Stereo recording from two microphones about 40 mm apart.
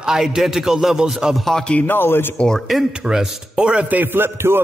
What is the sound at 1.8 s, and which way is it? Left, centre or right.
Speech, left.